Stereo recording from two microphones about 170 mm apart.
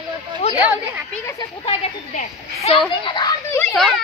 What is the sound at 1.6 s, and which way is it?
A woman's voice, 35° left (ahead or behind).